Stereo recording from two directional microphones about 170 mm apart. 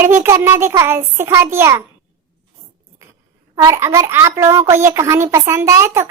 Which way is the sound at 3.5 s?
20° right (ahead or behind).